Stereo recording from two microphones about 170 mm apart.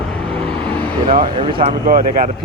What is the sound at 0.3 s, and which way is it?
Vehicle, 30° right (ahead or behind).